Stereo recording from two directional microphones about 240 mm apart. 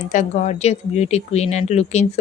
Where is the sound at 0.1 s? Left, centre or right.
Left.